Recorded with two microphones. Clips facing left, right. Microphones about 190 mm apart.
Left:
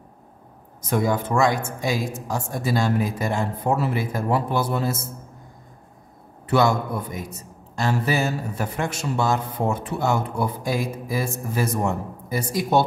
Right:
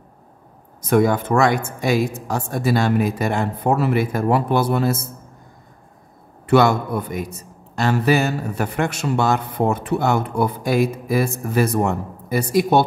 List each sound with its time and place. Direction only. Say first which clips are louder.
0.8 s speech: right 6 dB; 65° right (ahead or behind)
6.4 s a man's voice: right 4 dB; 65° right (ahead or behind)